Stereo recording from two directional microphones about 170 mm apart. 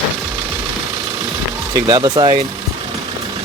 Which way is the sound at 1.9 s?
25° right (ahead or behind).